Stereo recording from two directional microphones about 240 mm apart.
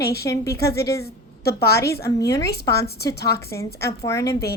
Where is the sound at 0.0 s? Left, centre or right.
Left.